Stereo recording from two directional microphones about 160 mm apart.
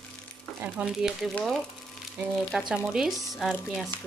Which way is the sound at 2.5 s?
5° right (ahead or behind).